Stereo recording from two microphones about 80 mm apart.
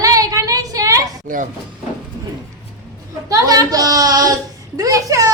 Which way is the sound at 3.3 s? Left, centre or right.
Right.